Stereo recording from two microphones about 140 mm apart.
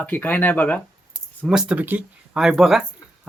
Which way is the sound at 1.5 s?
5° right (ahead or behind).